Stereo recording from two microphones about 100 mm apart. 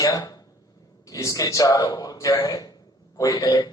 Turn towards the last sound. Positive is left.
turn(degrees=40)  # may be behind; listen again after turning